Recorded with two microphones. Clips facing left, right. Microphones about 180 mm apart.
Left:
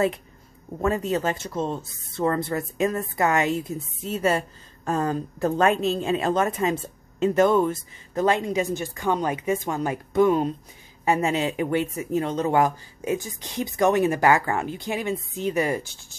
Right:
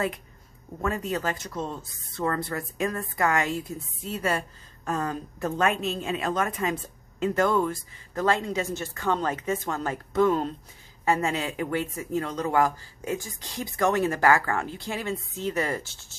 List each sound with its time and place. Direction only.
0.7 s speech: 25° left (ahead or behind)